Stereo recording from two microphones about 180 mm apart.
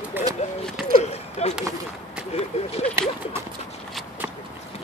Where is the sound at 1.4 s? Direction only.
35° left (ahead or behind).